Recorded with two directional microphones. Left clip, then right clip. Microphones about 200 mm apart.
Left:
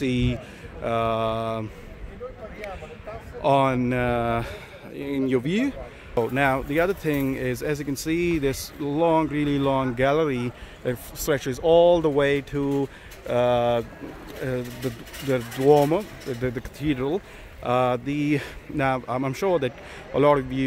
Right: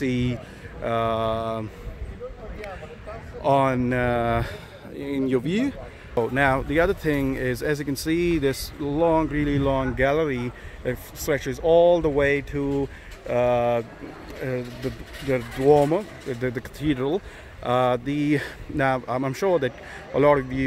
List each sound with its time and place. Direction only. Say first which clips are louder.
0.0 s speech: even; 5° left (ahead or behind)
3.4 s speech: even; 5° left (ahead or behind)